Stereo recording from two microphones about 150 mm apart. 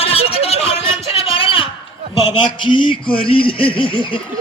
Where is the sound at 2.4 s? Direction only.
35° left (ahead or behind).